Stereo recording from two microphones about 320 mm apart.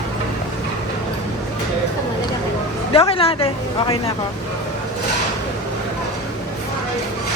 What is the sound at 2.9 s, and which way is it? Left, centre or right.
Speech, centre.